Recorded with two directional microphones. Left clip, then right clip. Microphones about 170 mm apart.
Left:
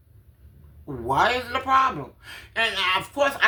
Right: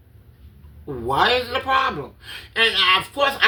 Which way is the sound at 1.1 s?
20° left (ahead or behind).